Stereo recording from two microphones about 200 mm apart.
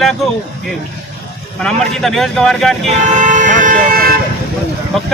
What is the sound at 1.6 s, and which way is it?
Speech, centre (ahead or behind).